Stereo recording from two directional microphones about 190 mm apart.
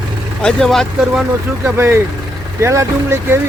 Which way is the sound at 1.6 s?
15° right (ahead or behind).